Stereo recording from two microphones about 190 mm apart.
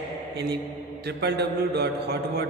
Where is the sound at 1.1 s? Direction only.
60° right (ahead or behind).